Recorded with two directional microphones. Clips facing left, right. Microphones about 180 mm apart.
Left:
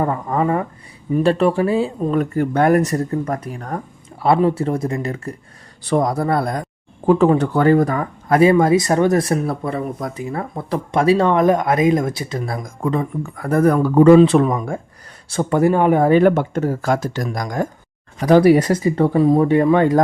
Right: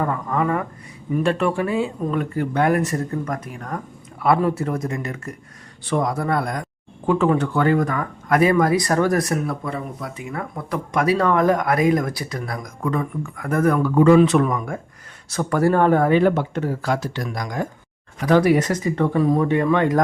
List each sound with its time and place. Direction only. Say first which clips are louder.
0.0 s speech: left 3 dB; 30° left (ahead or behind)
14.2 s speech: left 4 dB; 30° left (ahead or behind)
16.2 s speech: left 4 dB; 50° left (ahead or behind); by 20.0 s 30° left (ahead or behind)